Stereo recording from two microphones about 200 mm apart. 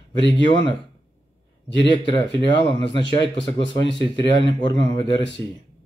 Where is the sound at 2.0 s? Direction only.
25° left (ahead or behind).